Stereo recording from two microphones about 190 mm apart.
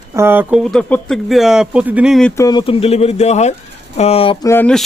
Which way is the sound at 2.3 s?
20° left (ahead or behind).